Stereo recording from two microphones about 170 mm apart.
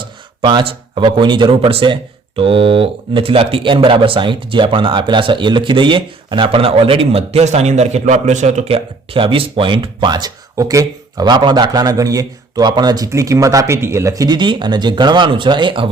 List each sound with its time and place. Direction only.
0.0 s speech: 30° right (ahead or behind)